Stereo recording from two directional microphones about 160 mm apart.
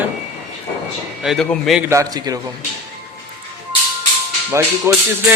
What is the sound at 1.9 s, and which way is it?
Speech, 20° right (ahead or behind).